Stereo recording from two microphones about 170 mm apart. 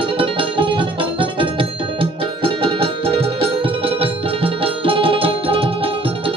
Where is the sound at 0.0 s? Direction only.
30° right (ahead or behind).